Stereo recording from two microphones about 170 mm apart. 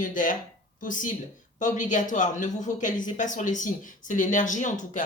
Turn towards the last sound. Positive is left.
turn(degrees=45)  # may be behind; listen again after turning